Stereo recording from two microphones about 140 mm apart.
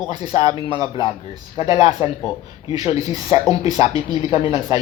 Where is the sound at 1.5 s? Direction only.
50° left (ahead or behind).